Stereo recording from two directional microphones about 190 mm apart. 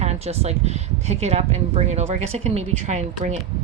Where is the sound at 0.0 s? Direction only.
35° right (ahead or behind).